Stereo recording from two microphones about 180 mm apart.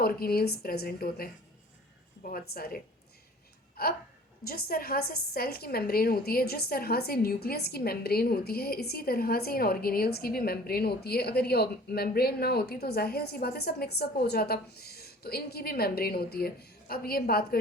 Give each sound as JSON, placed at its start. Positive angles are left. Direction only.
{"t": 0.0, "sound": "a woman's voice", "side_deg": 55}